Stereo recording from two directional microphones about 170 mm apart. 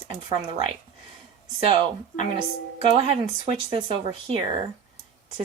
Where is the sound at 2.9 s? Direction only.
35° right (ahead or behind).